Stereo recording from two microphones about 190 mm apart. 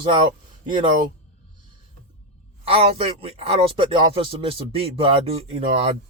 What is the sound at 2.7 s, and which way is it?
Speech, 30° right (ahead or behind).